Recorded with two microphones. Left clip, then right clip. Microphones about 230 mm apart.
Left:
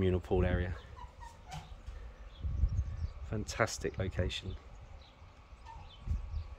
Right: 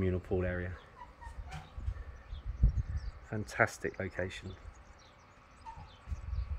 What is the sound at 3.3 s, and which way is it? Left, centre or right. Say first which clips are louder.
Speech: right 3 dB; centre.